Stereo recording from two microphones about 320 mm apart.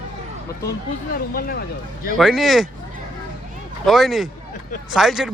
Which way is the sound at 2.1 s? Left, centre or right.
Centre.